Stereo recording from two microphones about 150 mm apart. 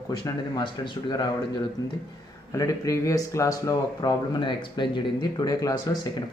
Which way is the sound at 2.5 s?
20° left (ahead or behind).